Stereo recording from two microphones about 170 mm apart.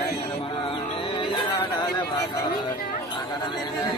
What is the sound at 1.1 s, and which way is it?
Music, 25° left (ahead or behind).